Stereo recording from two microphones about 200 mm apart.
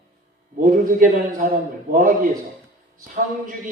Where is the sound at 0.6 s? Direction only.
45° right (ahead or behind).